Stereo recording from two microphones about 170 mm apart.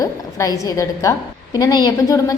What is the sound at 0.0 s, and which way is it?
A woman's voice, 20° left (ahead or behind).